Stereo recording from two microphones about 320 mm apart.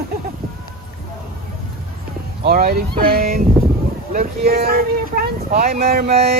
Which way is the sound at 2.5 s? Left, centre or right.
Right.